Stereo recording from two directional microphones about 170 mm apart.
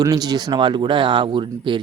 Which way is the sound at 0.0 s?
20° right (ahead or behind).